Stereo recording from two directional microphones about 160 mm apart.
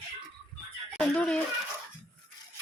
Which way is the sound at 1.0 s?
5° left (ahead or behind).